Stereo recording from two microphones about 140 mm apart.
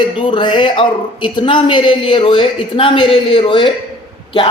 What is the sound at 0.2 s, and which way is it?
A woman's voice, 35° left (ahead or behind).